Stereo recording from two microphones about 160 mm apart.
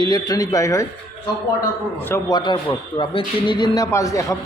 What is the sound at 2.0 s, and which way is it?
Speech, 15° left (ahead or behind).